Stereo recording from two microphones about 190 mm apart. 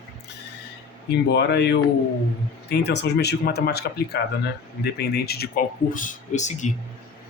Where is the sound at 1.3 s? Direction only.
60° left (ahead or behind); by 6.7 s 40° left (ahead or behind).